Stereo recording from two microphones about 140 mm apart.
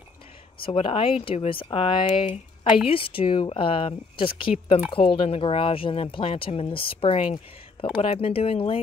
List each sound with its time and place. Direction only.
0.6 s speech: 40° left (ahead or behind)